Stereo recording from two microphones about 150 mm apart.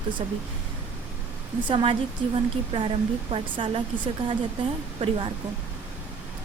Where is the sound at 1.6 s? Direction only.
35° right (ahead or behind).